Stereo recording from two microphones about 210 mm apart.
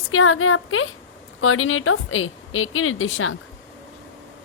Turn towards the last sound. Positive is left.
turn(degrees=70)  # may be behind; listen again after turning